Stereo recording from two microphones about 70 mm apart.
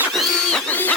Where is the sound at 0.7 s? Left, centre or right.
Left.